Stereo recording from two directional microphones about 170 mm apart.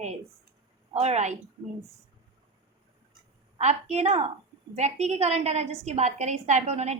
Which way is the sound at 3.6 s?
40° right (ahead or behind).